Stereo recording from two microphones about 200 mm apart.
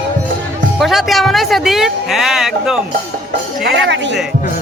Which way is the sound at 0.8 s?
Centre (ahead or behind).